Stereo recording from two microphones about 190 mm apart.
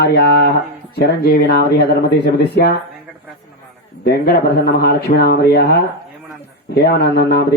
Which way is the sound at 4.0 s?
55° left (ahead or behind).